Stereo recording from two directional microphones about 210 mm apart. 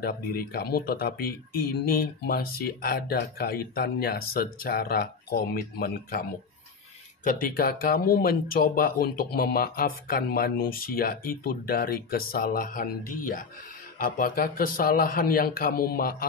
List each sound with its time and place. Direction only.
0.0 s speech: 45° left (ahead or behind)
7.2 s speech: 45° left (ahead or behind)